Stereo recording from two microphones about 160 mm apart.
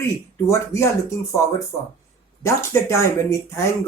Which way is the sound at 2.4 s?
20° left (ahead or behind).